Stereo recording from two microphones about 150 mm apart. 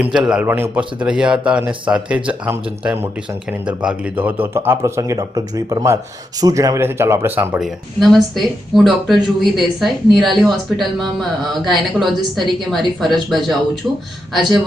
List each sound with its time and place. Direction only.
0.0 s a man's voice: 5° right (ahead or behind)
7.6 s speech: centre (ahead or behind)